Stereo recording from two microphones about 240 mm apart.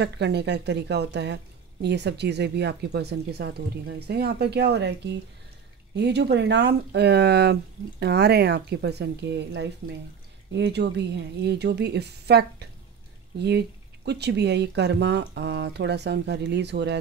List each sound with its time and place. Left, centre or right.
0.0 s a woman's voice: right